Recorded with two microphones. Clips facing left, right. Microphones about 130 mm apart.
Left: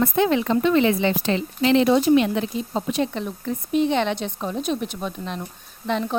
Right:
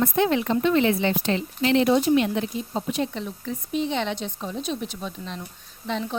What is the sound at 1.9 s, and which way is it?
A woman's voice, 90° left.